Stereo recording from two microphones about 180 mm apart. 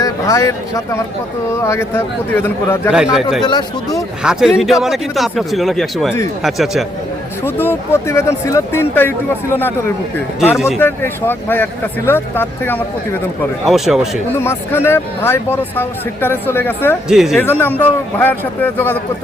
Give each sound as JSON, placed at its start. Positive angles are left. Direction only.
{"t": 0.0, "sound": "speech", "side_deg": 20}
{"t": 2.9, "sound": "speech", "side_deg": -5}
{"t": 7.4, "sound": "speech", "side_deg": 10}
{"t": 10.5, "sound": "speech", "side_deg": 0}
{"t": 10.8, "sound": "speech", "side_deg": 10}
{"t": 13.7, "sound": "speech", "side_deg": 0}
{"t": 14.3, "sound": "speech", "side_deg": 15}
{"t": 17.1, "sound": "speech", "side_deg": 0}
{"t": 17.4, "sound": "speech", "side_deg": 10}